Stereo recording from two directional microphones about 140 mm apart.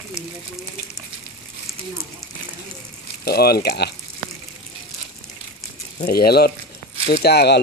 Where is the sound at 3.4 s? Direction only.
90° left.